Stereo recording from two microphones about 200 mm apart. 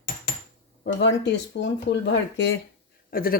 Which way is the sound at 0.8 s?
60° left (ahead or behind).